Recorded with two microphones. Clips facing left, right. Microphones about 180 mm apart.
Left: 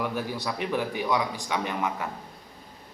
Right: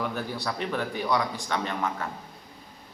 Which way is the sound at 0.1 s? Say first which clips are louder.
Left 1 dB; 15° left (ahead or behind).